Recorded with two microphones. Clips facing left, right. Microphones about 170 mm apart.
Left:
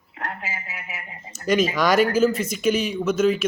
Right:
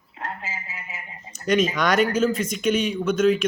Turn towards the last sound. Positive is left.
turn(degrees=5)  # may be behind; listen again after turning